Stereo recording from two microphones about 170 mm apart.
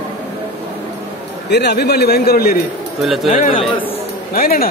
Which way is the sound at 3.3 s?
55° left (ahead or behind).